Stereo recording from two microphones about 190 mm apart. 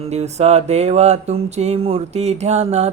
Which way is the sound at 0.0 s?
35° right (ahead or behind).